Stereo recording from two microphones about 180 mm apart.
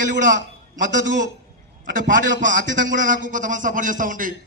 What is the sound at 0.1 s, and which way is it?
A man's voice, 45° right (ahead or behind).